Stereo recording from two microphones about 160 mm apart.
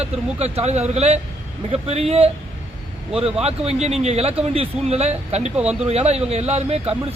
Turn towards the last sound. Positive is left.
turn(degrees=-40)  # may be behind; listen again after turning